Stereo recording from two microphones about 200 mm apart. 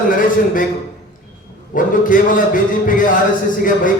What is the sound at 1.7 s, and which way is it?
A man's voice, 40° left (ahead or behind).